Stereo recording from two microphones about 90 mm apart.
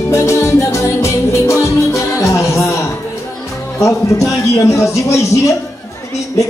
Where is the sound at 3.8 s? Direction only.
35° left (ahead or behind).